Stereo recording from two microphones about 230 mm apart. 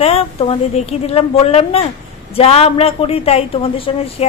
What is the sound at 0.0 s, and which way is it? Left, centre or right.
A woman's voice, left.